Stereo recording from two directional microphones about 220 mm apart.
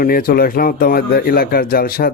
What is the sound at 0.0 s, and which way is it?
A man's voice, 40° left (ahead or behind).